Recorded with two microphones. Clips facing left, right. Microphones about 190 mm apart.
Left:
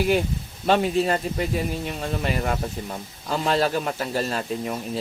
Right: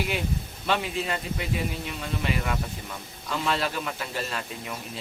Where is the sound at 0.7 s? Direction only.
40° left (ahead or behind).